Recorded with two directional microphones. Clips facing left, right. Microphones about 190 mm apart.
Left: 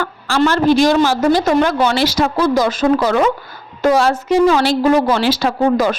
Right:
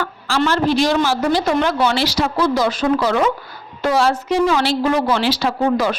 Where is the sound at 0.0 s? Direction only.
50° left (ahead or behind).